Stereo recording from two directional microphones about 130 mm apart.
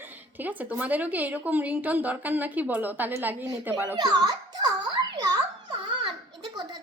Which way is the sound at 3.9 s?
35° right (ahead or behind).